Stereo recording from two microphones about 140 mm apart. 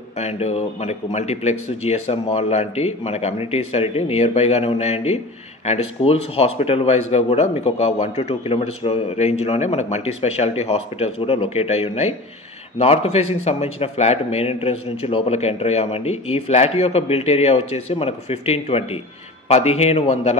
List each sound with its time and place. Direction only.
0.2 s a man's voice: 50° left (ahead or behind)